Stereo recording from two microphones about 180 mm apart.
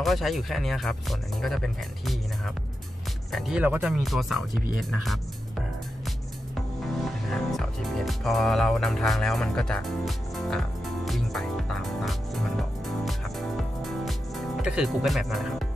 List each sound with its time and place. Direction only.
0.0 s speech: centre (ahead or behind)
7.2 s speech: centre (ahead or behind)
11.1 s music: centre (ahead or behind)